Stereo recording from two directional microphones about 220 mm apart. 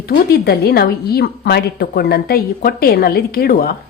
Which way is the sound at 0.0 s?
45° left (ahead or behind).